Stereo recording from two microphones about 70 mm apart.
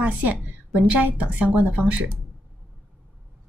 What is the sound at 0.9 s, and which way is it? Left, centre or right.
A woman's voice, centre.